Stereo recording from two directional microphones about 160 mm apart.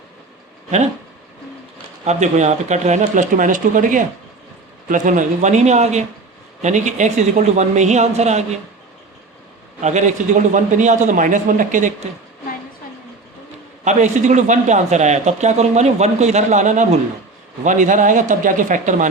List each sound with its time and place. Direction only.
2.0 s a man's voice: 45° right (ahead or behind)
9.8 s a man's voice: 50° right (ahead or behind)
13.8 s a man's voice: 50° right (ahead or behind)